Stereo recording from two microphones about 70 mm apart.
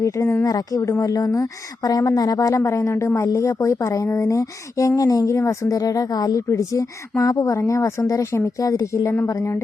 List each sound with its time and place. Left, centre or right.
0.4 s speech: left
0.8 s a woman's voice: left
1.0 s a woman's voice: left
5.3 s speech: left
6.5 s a woman's voice: left